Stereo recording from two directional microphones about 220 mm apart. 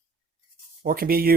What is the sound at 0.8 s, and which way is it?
Speech, 40° right (ahead or behind).